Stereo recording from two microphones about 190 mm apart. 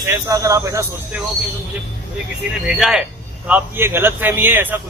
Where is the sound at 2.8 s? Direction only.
5° right (ahead or behind).